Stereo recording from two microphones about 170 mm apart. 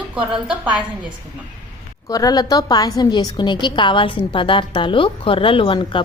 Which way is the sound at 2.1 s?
20° left (ahead or behind).